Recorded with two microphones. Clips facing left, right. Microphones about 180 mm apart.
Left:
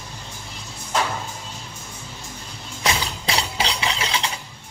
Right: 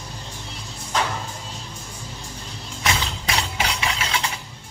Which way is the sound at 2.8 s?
30° left (ahead or behind).